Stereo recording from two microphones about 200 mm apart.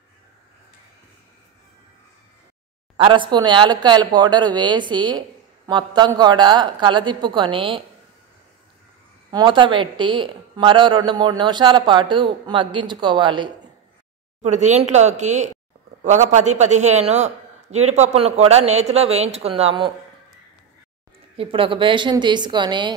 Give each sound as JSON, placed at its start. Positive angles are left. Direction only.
{"t": 3.0, "sound": "speech", "side_deg": -25}
{"t": 9.3, "sound": "speech", "side_deg": -20}
{"t": 14.4, "sound": "a man's voice", "side_deg": -35}
{"t": 21.4, "sound": "speech", "side_deg": -25}